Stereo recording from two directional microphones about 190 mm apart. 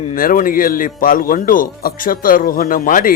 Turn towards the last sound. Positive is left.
turn(degrees=45)  # may be behind; listen again after turning